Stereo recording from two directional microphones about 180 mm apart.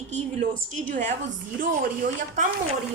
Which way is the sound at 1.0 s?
40° right (ahead or behind).